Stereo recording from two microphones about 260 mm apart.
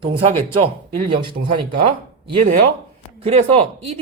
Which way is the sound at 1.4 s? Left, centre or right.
Right.